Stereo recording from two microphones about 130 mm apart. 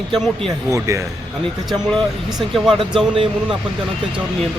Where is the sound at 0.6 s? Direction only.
25° right (ahead or behind).